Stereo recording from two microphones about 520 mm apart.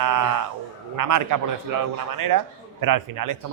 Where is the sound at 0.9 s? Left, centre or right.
Right.